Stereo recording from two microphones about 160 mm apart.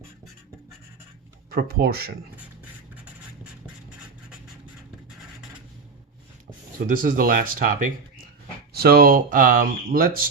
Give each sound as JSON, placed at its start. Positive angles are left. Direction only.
{"t": 1.5, "sound": "speech", "side_deg": -70}
{"t": 6.7, "sound": "speech", "side_deg": -60}
{"t": 8.7, "sound": "speech", "side_deg": -75}